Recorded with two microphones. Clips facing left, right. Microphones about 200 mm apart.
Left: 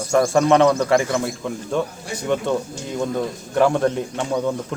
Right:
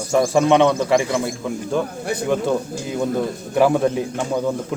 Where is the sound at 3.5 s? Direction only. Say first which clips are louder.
Right 1 dB; 5° right (ahead or behind).